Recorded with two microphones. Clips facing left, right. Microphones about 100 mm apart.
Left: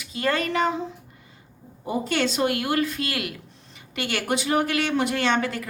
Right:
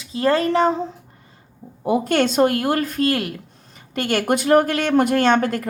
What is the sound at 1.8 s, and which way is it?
Speech, 55° right (ahead or behind).